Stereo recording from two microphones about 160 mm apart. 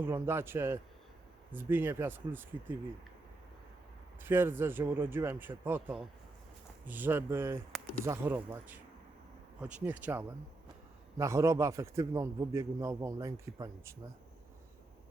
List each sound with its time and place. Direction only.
0.0 s speech: 15° right (ahead or behind)
4.2 s speech: 15° right (ahead or behind)
6.8 s a man's voice: 10° right (ahead or behind)